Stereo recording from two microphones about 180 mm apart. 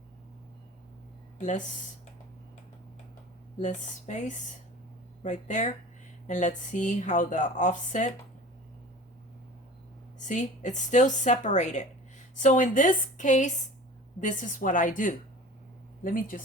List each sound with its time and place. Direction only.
1.4 s speech: 45° left (ahead or behind)
3.6 s speech: 40° left (ahead or behind)
10.2 s speech: 45° left (ahead or behind)